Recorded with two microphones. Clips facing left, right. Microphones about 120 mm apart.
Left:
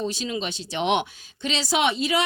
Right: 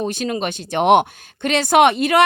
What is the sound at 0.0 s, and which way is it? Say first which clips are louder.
A woman's voice: right 6 dB; 55° right (ahead or behind).